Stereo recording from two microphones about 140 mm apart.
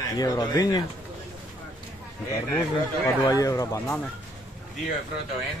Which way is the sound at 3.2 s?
25° left (ahead or behind).